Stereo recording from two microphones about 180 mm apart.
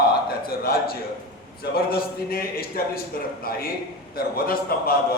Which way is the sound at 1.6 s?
55° left (ahead or behind).